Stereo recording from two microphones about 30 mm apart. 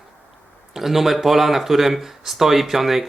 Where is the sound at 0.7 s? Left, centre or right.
Centre.